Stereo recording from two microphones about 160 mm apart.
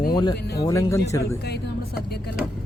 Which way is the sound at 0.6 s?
20° left (ahead or behind).